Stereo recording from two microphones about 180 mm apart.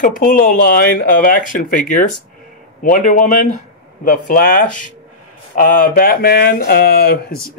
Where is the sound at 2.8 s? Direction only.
45° left (ahead or behind).